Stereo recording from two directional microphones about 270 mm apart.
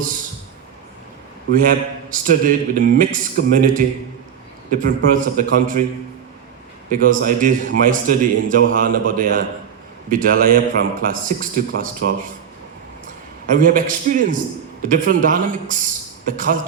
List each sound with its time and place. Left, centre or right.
1.5 s a man's voice: right
6.9 s a man's voice: right
13.5 s a man's voice: right